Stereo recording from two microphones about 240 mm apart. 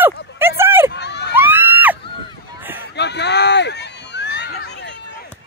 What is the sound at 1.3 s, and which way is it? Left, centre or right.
Screaming, centre.